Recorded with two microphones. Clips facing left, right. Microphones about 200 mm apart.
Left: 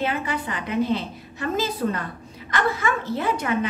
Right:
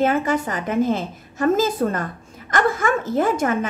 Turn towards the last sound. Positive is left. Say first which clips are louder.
# right 5 dB
turn(degrees=-45)  # may be behind; listen again after turning